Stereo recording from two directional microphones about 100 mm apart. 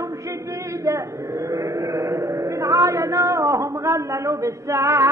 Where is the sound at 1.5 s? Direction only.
30° right (ahead or behind).